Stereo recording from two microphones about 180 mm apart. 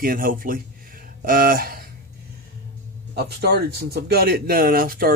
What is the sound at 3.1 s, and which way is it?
Speech, 65° right (ahead or behind).